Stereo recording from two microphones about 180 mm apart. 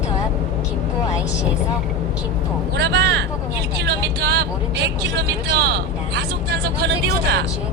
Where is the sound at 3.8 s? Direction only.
65° right (ahead or behind).